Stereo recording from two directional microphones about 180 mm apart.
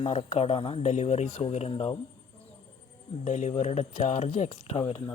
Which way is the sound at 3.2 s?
45° left (ahead or behind).